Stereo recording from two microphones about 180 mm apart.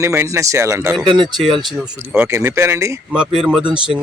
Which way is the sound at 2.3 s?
15° right (ahead or behind).